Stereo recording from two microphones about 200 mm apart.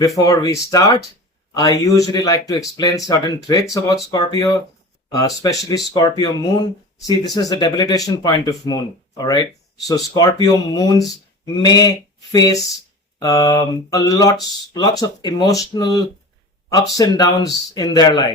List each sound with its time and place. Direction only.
0.2 s speech: 20° left (ahead or behind)